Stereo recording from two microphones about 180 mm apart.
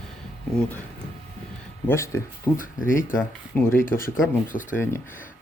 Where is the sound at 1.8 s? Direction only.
15° left (ahead or behind).